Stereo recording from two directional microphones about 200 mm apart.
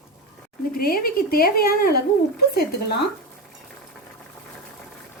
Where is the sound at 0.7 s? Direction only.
45° left (ahead or behind).